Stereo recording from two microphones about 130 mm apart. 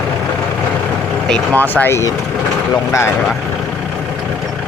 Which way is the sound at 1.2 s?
10° left (ahead or behind).